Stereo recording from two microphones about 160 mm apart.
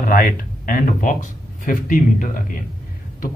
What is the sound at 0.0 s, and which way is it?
A man's voice, 60° left (ahead or behind).